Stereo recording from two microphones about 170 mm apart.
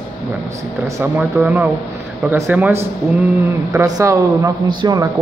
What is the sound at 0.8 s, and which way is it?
Speech, 15° right (ahead or behind).